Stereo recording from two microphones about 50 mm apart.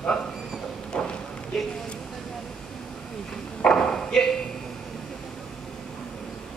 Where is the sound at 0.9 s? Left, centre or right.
Centre.